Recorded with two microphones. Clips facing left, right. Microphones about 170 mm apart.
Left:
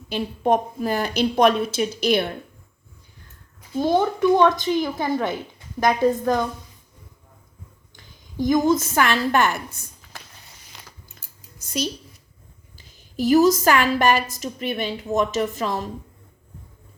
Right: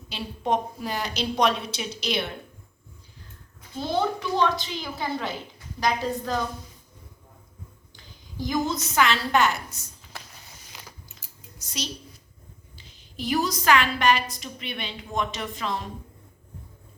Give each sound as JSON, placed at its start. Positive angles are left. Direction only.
{"t": 0.1, "sound": "a woman's voice", "side_deg": 50}
{"t": 3.8, "sound": "a woman's voice", "side_deg": 50}
{"t": 8.4, "sound": "a woman's voice", "side_deg": 50}
{"t": 10.7, "sound": "mechanisms", "side_deg": -5}
{"t": 11.6, "sound": "a woman's voice", "side_deg": 50}